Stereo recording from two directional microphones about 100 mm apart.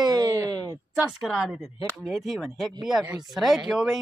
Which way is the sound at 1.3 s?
Centre (ahead or behind).